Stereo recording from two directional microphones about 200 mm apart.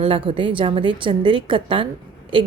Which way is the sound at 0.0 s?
25° right (ahead or behind).